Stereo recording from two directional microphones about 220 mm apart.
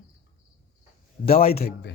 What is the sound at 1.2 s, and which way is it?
Speech, 40° left (ahead or behind).